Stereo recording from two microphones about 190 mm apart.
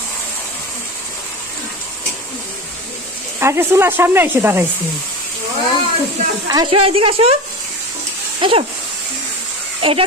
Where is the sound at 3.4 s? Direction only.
15° right (ahead or behind).